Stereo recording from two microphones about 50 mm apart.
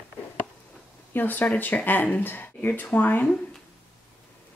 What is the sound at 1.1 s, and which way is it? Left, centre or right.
Speech, left.